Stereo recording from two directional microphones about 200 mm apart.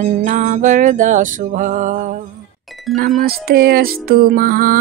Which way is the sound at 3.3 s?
50° right (ahead or behind).